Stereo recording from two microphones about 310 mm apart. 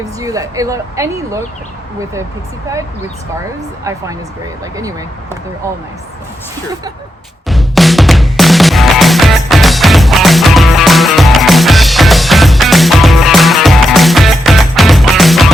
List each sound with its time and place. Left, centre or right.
0.2 s speech: centre
3.8 s speech: centre
7.4 s music: centre